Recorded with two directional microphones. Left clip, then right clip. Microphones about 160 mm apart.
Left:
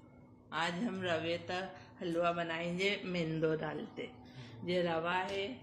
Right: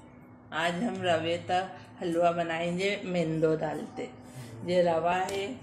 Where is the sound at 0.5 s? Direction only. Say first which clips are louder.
Right 7 dB; 35° left (ahead or behind).